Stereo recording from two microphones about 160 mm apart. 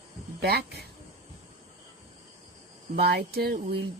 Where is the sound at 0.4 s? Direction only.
85° right.